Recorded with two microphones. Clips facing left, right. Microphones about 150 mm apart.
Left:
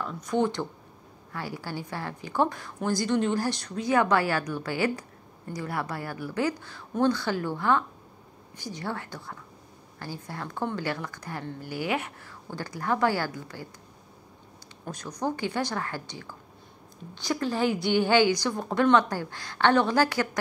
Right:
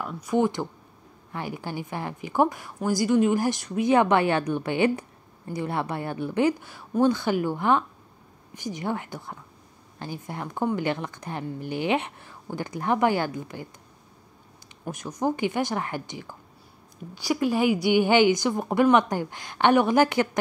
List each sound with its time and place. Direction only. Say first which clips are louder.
0.0 s a woman's voice: right 3 dB; 10° right (ahead or behind)
15.1 s a woman's voice: right 4 dB; 15° right (ahead or behind)